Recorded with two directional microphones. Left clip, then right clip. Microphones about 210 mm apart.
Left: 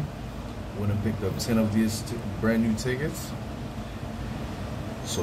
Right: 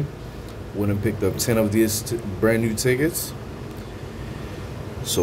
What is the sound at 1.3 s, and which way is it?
Speech, 45° right (ahead or behind).